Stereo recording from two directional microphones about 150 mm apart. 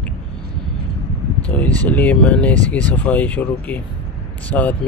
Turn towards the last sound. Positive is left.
turn(degrees=10)  # may be behind; listen again after turning